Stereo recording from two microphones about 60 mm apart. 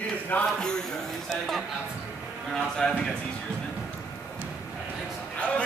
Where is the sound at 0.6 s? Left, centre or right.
Centre.